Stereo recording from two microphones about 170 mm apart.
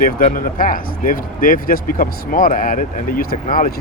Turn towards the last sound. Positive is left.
turn(degrees=55)  # may be behind; listen again after turning